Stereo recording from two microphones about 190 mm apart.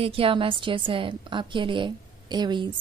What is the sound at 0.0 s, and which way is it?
A woman's voice, 30° right (ahead or behind).